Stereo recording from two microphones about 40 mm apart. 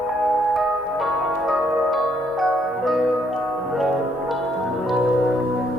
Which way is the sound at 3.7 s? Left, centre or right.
Centre.